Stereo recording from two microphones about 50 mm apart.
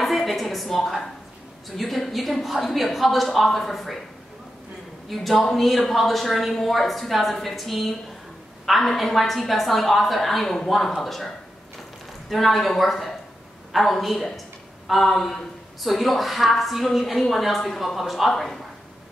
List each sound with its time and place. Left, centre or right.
0.0 s speech: centre
5.1 s speech: centre